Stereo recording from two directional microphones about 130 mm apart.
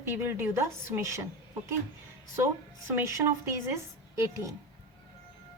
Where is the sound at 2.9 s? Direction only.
25° right (ahead or behind).